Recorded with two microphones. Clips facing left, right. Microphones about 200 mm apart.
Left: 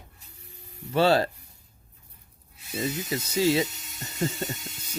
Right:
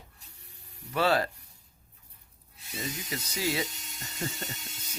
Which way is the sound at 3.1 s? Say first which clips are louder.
Left 9 dB; 25° left (ahead or behind).